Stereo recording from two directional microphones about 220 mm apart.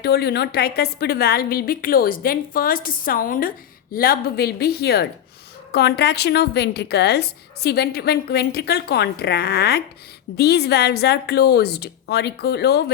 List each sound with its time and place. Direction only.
0.0 s a woman's voice: 45° left (ahead or behind)